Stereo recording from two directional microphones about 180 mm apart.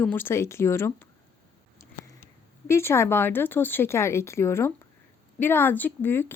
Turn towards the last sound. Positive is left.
turn(degrees=10)  # may be behind; listen again after turning